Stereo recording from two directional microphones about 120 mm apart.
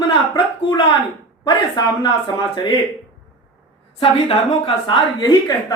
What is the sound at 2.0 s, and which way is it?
Speech, 40° left (ahead or behind).